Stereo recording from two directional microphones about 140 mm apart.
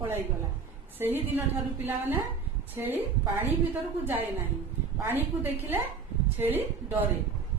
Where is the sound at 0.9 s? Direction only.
15° right (ahead or behind).